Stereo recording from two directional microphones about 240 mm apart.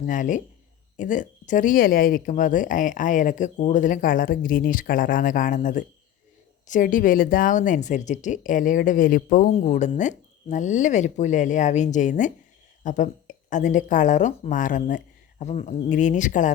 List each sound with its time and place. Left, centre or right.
0.0 s speech: left